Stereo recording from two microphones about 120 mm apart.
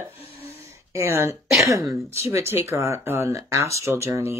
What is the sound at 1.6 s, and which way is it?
Speech, 25° right (ahead or behind).